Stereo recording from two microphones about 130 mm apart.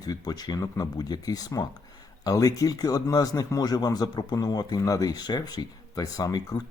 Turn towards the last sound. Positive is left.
turn(degrees=25)  # may be behind; listen again after turning